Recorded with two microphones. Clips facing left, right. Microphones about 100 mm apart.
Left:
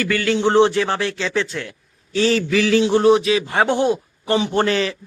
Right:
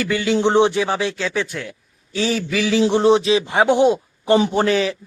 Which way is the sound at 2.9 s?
25° right (ahead or behind).